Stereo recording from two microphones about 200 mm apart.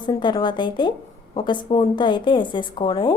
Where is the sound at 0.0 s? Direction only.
20° left (ahead or behind).